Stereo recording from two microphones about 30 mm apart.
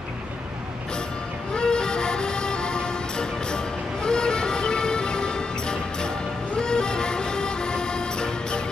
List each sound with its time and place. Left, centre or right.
1.5 s music: left